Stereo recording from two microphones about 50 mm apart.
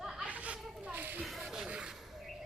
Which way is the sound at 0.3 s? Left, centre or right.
Right.